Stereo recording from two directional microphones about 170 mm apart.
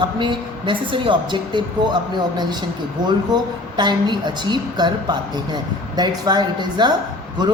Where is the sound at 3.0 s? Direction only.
25° right (ahead or behind).